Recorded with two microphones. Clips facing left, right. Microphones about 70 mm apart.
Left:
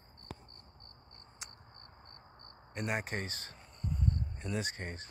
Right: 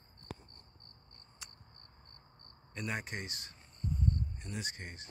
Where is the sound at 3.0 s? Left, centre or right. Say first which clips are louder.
Left 4 dB; left.